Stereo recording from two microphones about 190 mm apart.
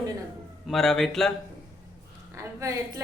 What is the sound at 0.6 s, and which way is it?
Speech, centre (ahead or behind).